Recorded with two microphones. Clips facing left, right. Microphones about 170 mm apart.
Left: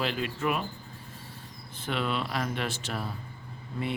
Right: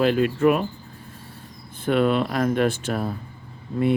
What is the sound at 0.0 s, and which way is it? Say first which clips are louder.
Speech: right 12 dB; 50° right (ahead or behind).